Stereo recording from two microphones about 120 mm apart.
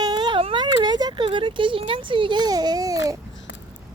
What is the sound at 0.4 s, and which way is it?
Speech, 40° right (ahead or behind).